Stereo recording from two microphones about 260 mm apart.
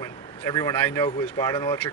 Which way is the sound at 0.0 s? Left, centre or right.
Centre.